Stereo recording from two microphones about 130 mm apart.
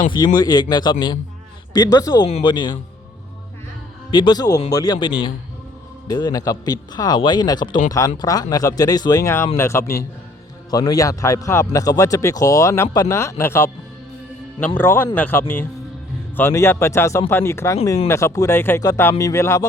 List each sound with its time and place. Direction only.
0.3 s speech: 30° left (ahead or behind)
4.1 s speech: 35° left (ahead or behind)
14.8 s speech: 15° left (ahead or behind)